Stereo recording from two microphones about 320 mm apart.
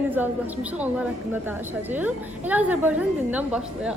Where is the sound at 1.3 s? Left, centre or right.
Centre.